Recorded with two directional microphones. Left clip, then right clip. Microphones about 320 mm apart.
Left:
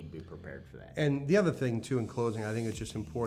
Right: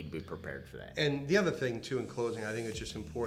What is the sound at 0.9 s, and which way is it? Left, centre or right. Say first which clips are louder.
Speech: left 2 dB; left.